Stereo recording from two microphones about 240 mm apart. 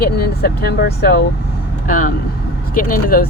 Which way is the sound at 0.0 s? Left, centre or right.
Left.